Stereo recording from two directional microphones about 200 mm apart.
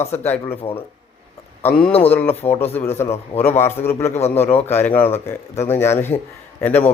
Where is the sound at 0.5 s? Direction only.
30° left (ahead or behind).